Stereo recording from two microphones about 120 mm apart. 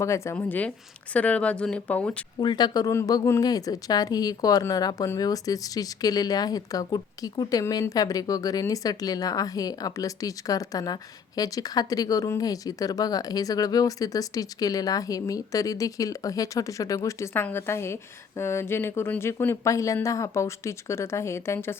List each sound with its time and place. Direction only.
0.0 s speech: 25° left (ahead or behind)
0.3 s speech: 15° left (ahead or behind)
2.4 s speech: 40° left (ahead or behind); by 21.8 s 20° left (ahead or behind)